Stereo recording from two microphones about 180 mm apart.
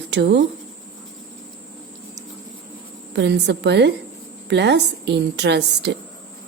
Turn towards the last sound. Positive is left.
turn(degrees=-70)  # may be behind; listen again after turning